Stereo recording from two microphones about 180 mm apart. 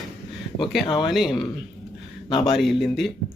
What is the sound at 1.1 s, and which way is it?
Speech, centre (ahead or behind).